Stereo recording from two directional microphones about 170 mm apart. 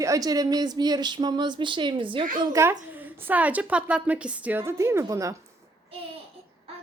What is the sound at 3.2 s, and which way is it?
A woman's voice, 10° right (ahead or behind).